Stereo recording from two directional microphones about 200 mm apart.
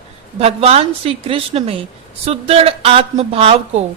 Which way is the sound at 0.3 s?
30° right (ahead or behind).